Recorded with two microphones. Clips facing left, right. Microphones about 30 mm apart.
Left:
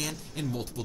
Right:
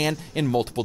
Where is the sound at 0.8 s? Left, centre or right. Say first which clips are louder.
Right 10 dB; right.